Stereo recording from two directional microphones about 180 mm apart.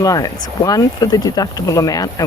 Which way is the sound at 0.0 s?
20° left (ahead or behind).